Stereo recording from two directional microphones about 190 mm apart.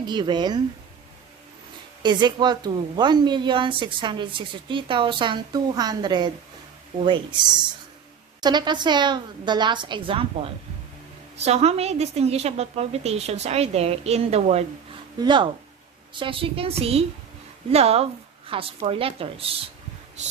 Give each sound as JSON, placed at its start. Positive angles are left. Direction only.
{"t": 0.0, "sound": "a woman's voice", "side_deg": -25}
{"t": 2.0, "sound": "a woman's voice", "side_deg": -25}